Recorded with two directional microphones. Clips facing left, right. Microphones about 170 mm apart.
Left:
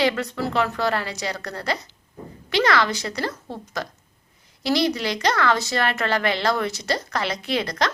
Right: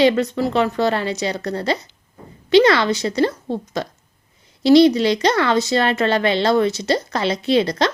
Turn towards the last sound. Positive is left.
turn(degrees=-25)  # may be behind; listen again after turning